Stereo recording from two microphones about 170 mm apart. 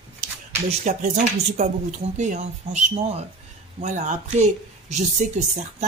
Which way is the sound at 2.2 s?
45° right (ahead or behind).